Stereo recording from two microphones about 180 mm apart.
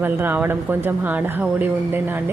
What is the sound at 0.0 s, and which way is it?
A woman's voice, 10° right (ahead or behind).